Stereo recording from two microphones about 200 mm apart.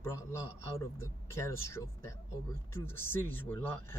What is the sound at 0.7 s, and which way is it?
Speech, 15° left (ahead or behind).